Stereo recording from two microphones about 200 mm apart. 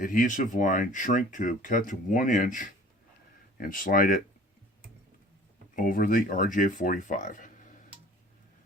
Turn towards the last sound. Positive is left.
turn(degrees=40)  # may be behind; listen again after turning